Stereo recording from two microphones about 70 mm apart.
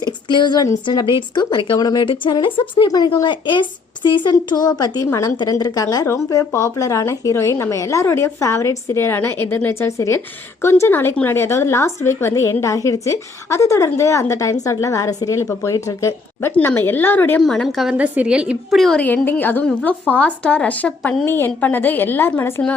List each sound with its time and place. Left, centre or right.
0.0 s a woman's voice: left
2.8 s a woman's voice: left
6.1 s a woman's voice: left
16.6 s a woman's voice: left
17.4 s a woman's voice: centre
17.9 s a woman's voice: right
18.7 s a woman's voice: centre
18.9 s speech: left
21.2 s a woman's voice: left